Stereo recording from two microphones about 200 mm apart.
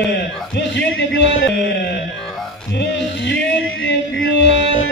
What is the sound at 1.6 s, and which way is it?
Speech, 65° left (ahead or behind).